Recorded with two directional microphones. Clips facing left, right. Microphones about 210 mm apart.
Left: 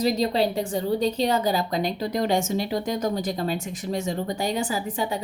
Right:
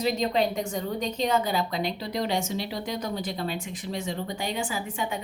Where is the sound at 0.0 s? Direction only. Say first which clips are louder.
Left 3 dB; 35° left (ahead or behind).